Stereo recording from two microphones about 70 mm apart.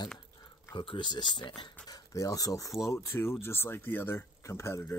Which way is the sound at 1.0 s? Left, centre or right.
Left.